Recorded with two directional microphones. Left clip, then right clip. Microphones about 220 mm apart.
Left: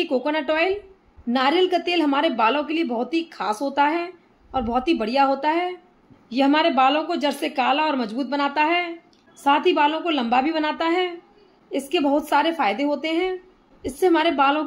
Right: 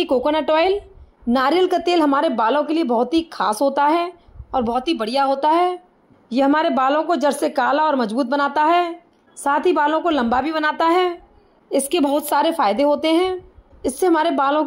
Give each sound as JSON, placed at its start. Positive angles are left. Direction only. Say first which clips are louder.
{"t": 0.0, "sound": "a woman's voice", "louder": "right 5 dB", "side_deg": -35}